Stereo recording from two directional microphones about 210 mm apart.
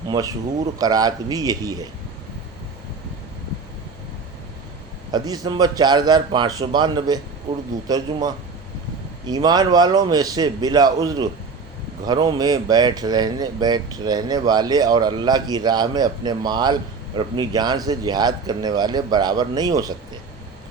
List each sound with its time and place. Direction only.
0.1 s a man's voice: 15° right (ahead or behind)
5.1 s a man's voice: 20° right (ahead or behind)